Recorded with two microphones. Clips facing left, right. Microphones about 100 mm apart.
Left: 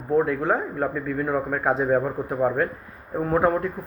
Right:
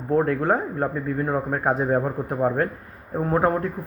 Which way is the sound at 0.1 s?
45° right (ahead or behind).